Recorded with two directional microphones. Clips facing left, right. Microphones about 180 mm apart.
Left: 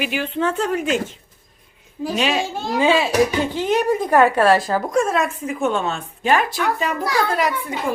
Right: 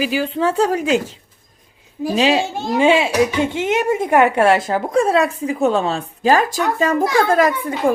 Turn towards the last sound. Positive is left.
turn(degrees=-45)  # may be behind; listen again after turning